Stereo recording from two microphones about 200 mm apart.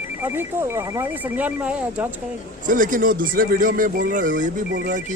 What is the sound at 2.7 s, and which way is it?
Speech, 40° right (ahead or behind).